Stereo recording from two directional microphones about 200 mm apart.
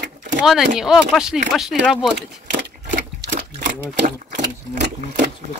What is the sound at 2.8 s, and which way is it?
Sewing machine, 40° right (ahead or behind).